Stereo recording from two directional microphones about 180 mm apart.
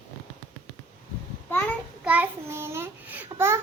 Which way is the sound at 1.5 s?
10° left (ahead or behind).